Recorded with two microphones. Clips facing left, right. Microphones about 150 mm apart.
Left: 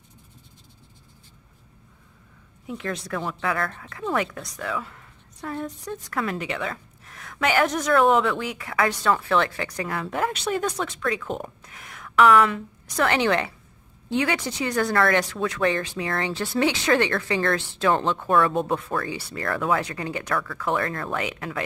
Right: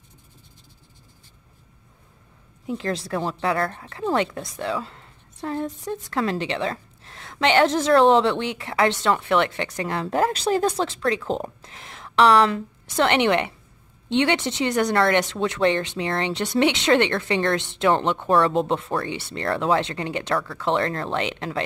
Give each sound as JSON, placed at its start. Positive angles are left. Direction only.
{"t": 2.6, "sound": "speech", "side_deg": -30}